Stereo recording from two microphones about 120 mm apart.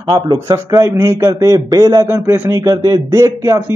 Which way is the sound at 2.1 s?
20° right (ahead or behind).